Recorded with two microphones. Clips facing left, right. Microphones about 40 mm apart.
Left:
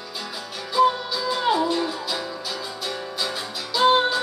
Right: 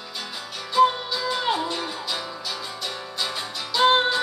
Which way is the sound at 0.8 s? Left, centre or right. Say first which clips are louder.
Even; right.